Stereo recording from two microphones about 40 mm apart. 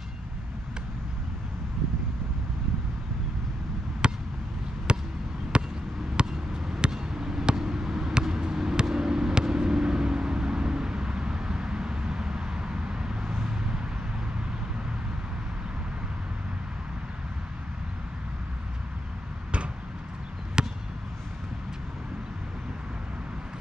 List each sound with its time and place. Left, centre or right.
4.0 s a sound: right
4.9 s basketball bounce: right
6.1 s a sound: right
8.1 s basketball bounce: centre
13.3 s vehicle: centre
20.6 s basketball bounce: centre